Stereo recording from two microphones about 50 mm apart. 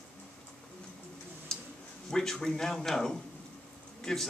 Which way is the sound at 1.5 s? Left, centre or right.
Centre.